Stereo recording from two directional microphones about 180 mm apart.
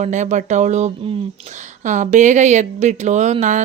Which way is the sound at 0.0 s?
40° right (ahead or behind).